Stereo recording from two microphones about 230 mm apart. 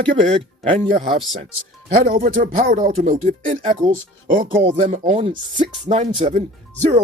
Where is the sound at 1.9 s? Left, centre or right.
Right.